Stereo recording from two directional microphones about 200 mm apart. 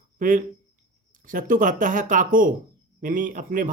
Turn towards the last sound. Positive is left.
turn(degrees=-40)  # may be behind; listen again after turning